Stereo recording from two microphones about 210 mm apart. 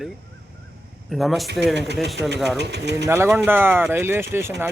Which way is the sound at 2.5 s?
55° right (ahead or behind).